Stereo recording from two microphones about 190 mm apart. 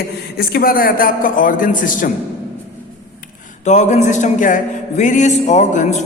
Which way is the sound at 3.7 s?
40° left (ahead or behind).